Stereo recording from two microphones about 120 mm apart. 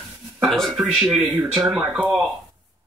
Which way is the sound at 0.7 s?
Centre (ahead or behind).